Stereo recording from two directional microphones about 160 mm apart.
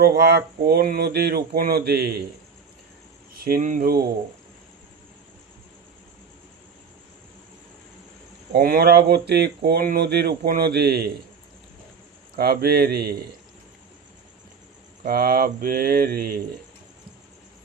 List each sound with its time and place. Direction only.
0.0 s speech: 90° right
3.3 s mantra: 70° right (ahead or behind)
8.5 s speech: 75° right (ahead or behind); by 11.1 s 90° right
12.4 s mantra: 75° right (ahead or behind)
15.0 s mantra: 70° right (ahead or behind)